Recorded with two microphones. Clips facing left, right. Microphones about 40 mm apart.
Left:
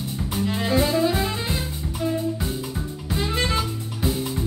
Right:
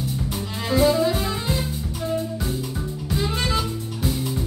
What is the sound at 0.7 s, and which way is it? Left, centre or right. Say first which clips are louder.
Music: right 3 dB; centre.